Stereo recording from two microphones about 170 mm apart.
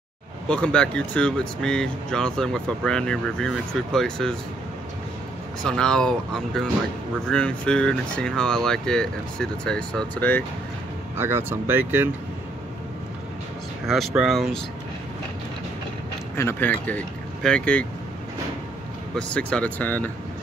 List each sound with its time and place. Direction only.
0.5 s speech: 5° left (ahead or behind)
5.6 s speech: 5° left (ahead or behind)
11.1 s speech: 15° right (ahead or behind)
13.8 s speech: centre (ahead or behind)
16.3 s speech: 15° left (ahead or behind)
19.1 s speech: 5° left (ahead or behind)